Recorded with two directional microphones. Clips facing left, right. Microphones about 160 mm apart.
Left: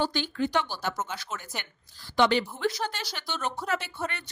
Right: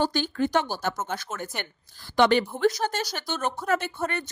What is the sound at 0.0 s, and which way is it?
Speech, 45° right (ahead or behind).